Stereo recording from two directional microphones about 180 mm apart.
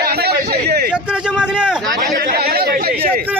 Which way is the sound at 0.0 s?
60° right (ahead or behind).